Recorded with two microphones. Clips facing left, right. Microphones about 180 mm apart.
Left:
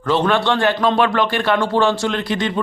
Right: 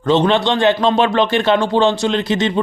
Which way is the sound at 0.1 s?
20° right (ahead or behind).